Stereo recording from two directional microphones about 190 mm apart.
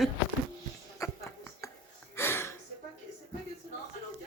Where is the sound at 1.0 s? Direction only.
15° left (ahead or behind).